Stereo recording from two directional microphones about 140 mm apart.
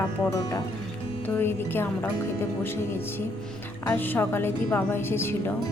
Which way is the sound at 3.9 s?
15° left (ahead or behind).